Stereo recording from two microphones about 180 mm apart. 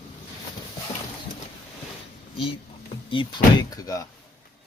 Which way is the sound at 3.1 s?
25° left (ahead or behind).